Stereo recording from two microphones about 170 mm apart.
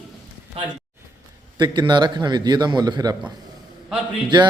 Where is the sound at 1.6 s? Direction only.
25° right (ahead or behind).